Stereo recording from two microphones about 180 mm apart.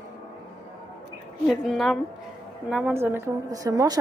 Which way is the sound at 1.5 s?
Centre (ahead or behind).